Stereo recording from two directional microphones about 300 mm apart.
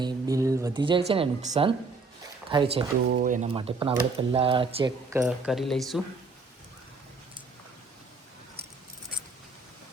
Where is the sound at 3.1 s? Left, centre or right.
Right.